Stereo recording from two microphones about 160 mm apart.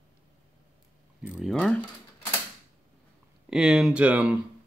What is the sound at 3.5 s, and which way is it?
Speech, 5° right (ahead or behind).